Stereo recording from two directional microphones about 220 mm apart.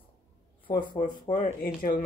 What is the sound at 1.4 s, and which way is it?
Speech, 40° left (ahead or behind).